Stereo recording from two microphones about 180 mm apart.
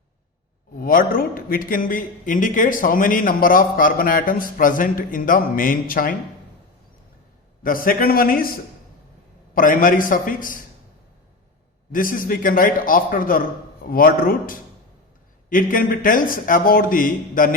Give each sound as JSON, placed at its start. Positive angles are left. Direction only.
{"t": 0.8, "sound": "a man's voice", "side_deg": 50}
{"t": 7.6, "sound": "a man's voice", "side_deg": 50}
{"t": 9.6, "sound": "a man's voice", "side_deg": 50}
{"t": 11.9, "sound": "a man's voice", "side_deg": 50}